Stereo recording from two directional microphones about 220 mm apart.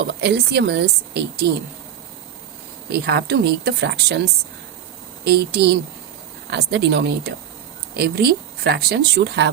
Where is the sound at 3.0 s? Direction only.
45° right (ahead or behind).